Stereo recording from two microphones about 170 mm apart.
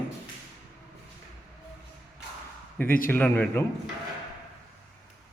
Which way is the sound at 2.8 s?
55° left (ahead or behind).